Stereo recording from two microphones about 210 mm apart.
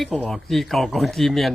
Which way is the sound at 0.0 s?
Centre (ahead or behind).